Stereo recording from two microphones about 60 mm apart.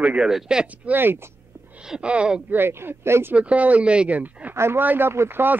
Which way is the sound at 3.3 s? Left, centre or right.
Right.